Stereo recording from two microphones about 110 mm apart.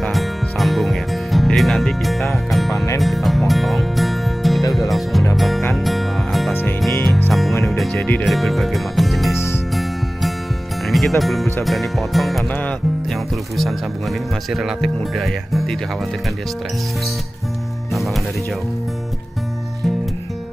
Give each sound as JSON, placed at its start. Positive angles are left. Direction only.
{"t": 0.0, "sound": "music", "side_deg": 0}
{"t": 2.7, "sound": "speech", "side_deg": 30}
{"t": 3.0, "sound": "music", "side_deg": 0}
{"t": 8.0, "sound": "speech", "side_deg": 15}
{"t": 8.3, "sound": "music", "side_deg": 0}
{"t": 9.3, "sound": "music", "side_deg": 25}
{"t": 10.9, "sound": "speech", "side_deg": 0}
{"t": 17.9, "sound": "music", "side_deg": 0}